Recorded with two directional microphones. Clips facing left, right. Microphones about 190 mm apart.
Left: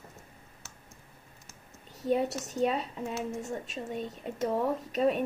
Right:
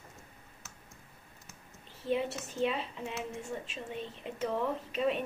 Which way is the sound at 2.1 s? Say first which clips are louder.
Left 4 dB; 40° left (ahead or behind).